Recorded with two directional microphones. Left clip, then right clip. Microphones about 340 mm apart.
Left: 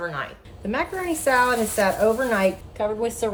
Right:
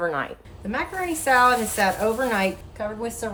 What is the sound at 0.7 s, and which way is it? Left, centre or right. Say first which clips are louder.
A woman's voice: left 1 dB; centre.